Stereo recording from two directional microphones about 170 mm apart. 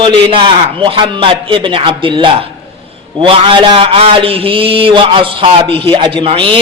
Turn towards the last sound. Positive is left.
turn(degrees=-30)  # may be behind; listen again after turning